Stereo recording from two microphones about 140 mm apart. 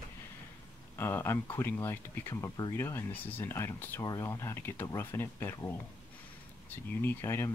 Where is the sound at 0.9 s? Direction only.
15° left (ahead or behind).